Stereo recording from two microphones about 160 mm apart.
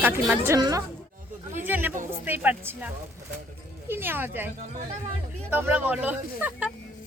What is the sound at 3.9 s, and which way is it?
Speech, 15° right (ahead or behind).